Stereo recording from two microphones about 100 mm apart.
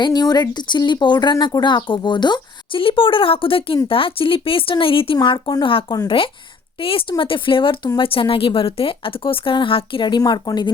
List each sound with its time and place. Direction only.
0.0 s speech: 40° left (ahead or behind); by 5.1 s 65° left (ahead or behind)
5.1 s speech: 50° left (ahead or behind)
6.1 s a woman's voice: 60° left (ahead or behind)